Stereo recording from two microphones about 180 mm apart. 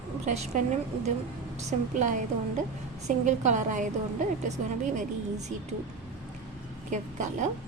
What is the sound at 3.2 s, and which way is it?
A woman's voice, 40° right (ahead or behind).